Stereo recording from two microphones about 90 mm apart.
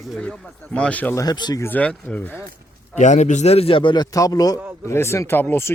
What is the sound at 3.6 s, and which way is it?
Speech, 70° left (ahead or behind).